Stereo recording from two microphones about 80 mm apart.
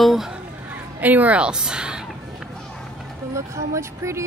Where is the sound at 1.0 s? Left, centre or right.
Centre.